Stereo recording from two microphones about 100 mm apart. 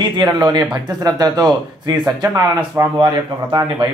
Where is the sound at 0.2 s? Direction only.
45° right (ahead or behind).